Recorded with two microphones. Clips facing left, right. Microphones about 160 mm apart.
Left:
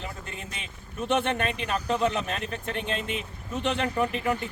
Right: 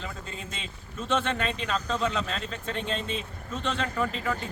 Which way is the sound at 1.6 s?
15° left (ahead or behind).